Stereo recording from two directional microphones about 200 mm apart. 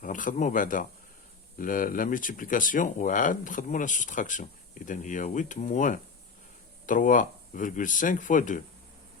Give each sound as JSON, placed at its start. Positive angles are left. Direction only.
{"t": 0.0, "sound": "speech", "side_deg": 40}